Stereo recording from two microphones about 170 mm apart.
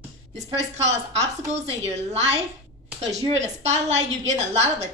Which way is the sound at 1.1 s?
40° right (ahead or behind).